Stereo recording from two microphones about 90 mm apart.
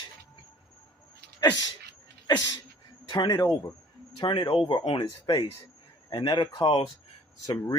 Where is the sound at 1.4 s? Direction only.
45° left (ahead or behind).